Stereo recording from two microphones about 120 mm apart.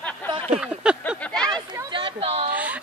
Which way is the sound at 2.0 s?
55° right (ahead or behind).